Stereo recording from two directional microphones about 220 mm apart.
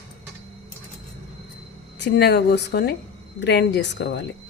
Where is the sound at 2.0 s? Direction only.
50° left (ahead or behind).